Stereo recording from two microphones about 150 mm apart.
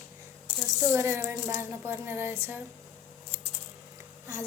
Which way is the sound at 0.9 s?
20° right (ahead or behind).